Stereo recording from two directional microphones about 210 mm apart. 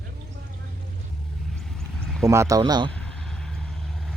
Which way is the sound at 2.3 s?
15° right (ahead or behind).